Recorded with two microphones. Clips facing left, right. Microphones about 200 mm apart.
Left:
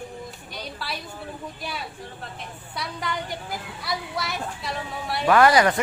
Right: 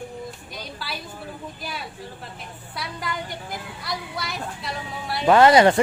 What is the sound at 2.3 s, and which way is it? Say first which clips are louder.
A woman's voice: left 1 dB; centre (ahead or behind).